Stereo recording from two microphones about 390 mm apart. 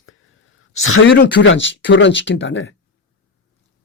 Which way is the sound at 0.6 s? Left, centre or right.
Left.